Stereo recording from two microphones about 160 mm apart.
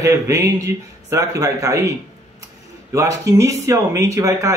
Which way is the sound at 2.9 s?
20° right (ahead or behind).